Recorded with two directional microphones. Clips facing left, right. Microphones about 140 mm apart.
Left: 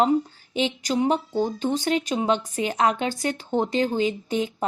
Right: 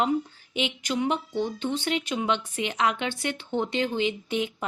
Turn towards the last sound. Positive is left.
turn(degrees=35)  # may be behind; listen again after turning